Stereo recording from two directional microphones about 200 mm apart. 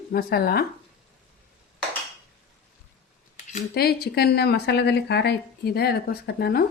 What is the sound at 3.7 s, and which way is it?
Speech, 50° left (ahead or behind).